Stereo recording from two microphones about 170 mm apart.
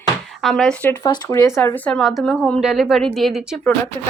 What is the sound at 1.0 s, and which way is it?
A woman's voice, 20° left (ahead or behind).